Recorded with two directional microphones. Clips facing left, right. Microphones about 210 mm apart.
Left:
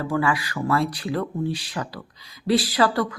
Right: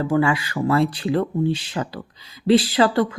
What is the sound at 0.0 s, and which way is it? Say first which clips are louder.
Speech: right 4 dB; 25° right (ahead or behind).